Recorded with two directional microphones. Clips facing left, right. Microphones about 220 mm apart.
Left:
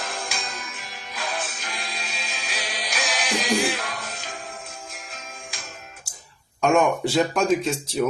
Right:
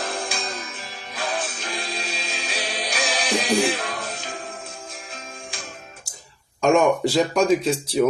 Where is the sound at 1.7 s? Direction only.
35° right (ahead or behind).